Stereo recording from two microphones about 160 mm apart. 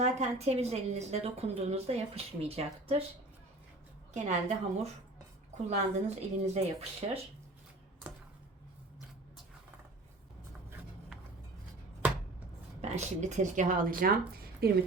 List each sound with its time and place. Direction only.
0.0 s a woman's voice: 45° right (ahead or behind)
4.1 s speech: 45° right (ahead or behind)
12.8 s speech: 45° right (ahead or behind)
14.6 s speech: 75° right (ahead or behind)